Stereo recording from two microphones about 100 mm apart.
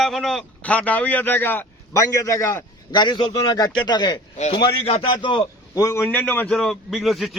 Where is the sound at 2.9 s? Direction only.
50° left (ahead or behind).